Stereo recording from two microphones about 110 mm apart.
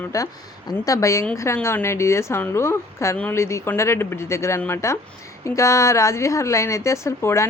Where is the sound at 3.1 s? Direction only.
15° left (ahead or behind).